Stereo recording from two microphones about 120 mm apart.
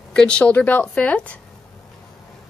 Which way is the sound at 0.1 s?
10° left (ahead or behind).